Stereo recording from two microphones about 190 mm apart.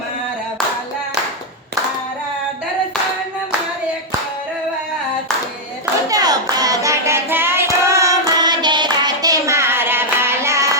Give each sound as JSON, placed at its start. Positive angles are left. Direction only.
{"t": 6.1, "sound": "child singing", "side_deg": -20}